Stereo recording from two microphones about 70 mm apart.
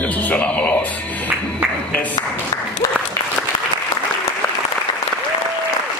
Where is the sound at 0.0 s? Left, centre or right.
Left.